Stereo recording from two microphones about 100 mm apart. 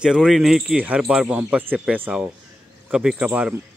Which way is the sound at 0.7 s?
15° right (ahead or behind).